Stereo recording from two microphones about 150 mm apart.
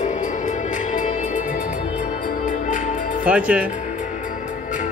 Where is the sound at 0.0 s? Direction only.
55° left (ahead or behind).